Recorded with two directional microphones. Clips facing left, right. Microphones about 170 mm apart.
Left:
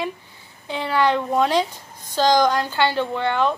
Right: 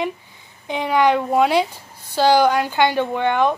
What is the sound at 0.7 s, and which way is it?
A woman's voice, 15° right (ahead or behind).